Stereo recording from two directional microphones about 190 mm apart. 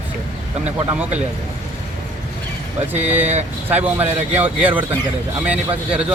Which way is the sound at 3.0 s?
10° right (ahead or behind).